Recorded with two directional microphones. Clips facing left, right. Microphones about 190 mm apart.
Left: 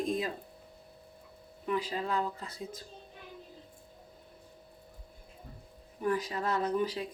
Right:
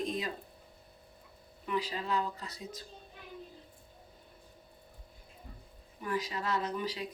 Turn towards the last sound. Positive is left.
turn(degrees=50)  # may be behind; listen again after turning